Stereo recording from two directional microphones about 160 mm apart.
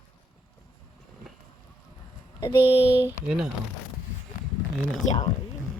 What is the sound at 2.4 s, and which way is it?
Speech, 40° left (ahead or behind).